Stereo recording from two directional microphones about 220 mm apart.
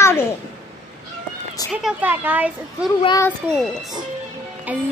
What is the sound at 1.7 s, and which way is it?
Speech, 5° right (ahead or behind).